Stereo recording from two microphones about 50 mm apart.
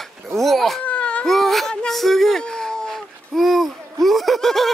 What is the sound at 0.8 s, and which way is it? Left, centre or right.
Baby cry, left.